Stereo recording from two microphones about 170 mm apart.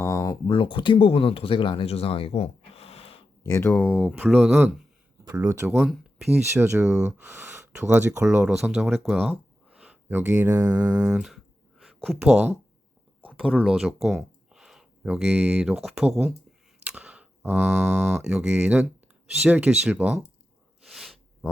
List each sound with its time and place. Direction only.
0.0 s speech: 20° left (ahead or behind); by 3.2 s 35° left (ahead or behind)
3.4 s speech: 15° left (ahead or behind)
3.8 s speech: 10° right (ahead or behind)
5.2 s speech: 20° right (ahead or behind)
5.7 s a sound: centre (ahead or behind)
6.3 s speech: 15° right (ahead or behind)
11.0 s a sound: 5° right (ahead or behind)
11.8 s speech: centre (ahead or behind)
13.6 s speech: 5° right (ahead or behind)
15.8 s a sound: centre (ahead or behind)
16.8 s speech: 5° right (ahead or behind)
20.8 s a sound: centre (ahead or behind)